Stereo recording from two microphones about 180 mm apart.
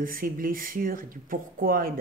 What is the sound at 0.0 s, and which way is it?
Speech, 55° right (ahead or behind).